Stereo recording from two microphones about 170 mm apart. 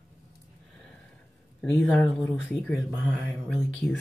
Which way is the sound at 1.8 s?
5° left (ahead or behind).